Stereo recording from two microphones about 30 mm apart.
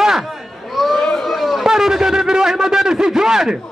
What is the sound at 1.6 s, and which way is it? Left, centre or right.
A man's voice, centre.